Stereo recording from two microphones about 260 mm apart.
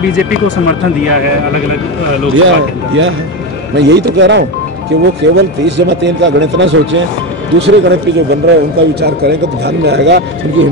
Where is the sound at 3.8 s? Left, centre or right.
Right.